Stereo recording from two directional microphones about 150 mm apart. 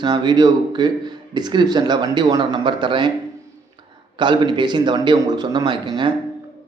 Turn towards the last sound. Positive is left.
turn(degrees=-30)  # may be behind; listen again after turning